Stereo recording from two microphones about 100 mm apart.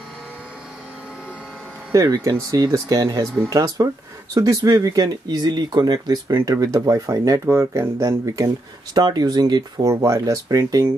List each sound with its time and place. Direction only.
1.9 s speech: 35° right (ahead or behind)
8.9 s speech: 40° right (ahead or behind)